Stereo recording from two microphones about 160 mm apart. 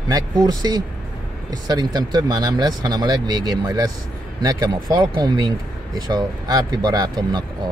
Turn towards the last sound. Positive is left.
turn(degrees=-25)  # may be behind; listen again after turning